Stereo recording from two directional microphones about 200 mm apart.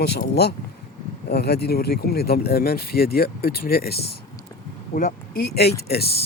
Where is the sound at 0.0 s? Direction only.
55° left (ahead or behind).